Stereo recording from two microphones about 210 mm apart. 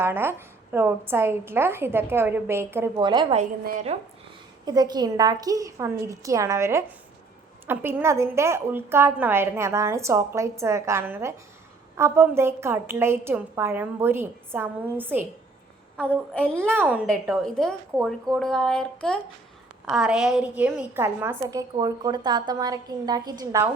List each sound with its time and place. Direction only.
0.0 s a woman's voice: 10° right (ahead or behind)
3.0 s a woman's voice: 20° right (ahead or behind)
3.3 s a woman's voice: 35° right (ahead or behind)
4.6 s a woman's voice: 20° right (ahead or behind)
16.0 s a woman's voice: 5° left (ahead or behind)
16.7 s a woman's voice: 5° right (ahead or behind)